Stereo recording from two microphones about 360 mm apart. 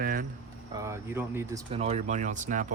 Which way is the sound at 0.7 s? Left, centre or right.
Centre.